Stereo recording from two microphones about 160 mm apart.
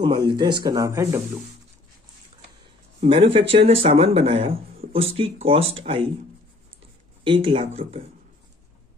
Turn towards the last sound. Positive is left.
turn(degrees=-35)  # may be behind; listen again after turning